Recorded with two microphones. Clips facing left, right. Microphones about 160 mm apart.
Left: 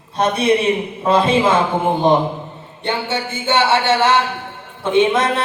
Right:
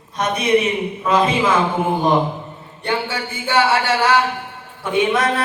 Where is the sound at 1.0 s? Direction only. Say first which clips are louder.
Left 3 dB; 30° left (ahead or behind).